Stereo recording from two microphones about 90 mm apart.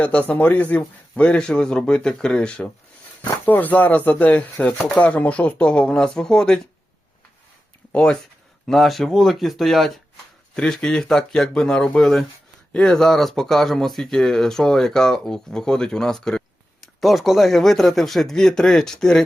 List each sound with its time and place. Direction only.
0.0 s speech: 15° left (ahead or behind)
7.9 s speech: 10° left (ahead or behind)